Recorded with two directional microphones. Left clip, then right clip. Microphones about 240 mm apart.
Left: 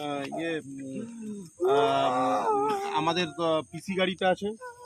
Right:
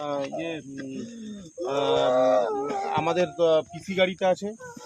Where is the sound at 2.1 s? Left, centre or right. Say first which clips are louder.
Right 4 dB; left.